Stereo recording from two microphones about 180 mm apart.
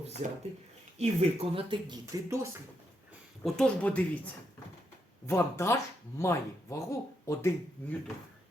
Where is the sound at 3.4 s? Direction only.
5° left (ahead or behind).